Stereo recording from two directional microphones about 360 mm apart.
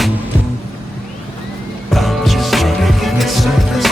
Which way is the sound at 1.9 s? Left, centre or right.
Centre.